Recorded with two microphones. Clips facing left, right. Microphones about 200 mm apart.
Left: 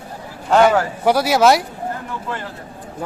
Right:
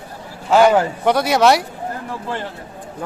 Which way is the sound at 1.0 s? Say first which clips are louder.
Left 2 dB; 5° left (ahead or behind).